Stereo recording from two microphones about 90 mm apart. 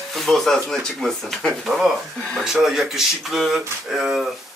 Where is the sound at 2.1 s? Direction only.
5° left (ahead or behind).